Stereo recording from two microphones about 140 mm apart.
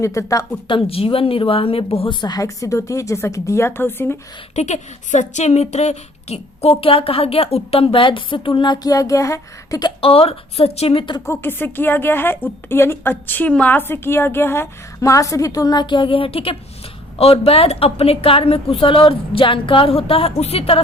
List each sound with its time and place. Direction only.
0.0 s a woman's voice: 20° left (ahead or behind)
0.7 s speech: 40° left (ahead or behind)
2.2 s a woman's voice: 25° left (ahead or behind)
4.5 s speech: 55° left (ahead or behind); by 9.9 s 25° left (ahead or behind)
10.0 s speech: 45° left (ahead or behind)
11.3 s a woman's voice: 15° left (ahead or behind); by 20.8 s 45° left (ahead or behind)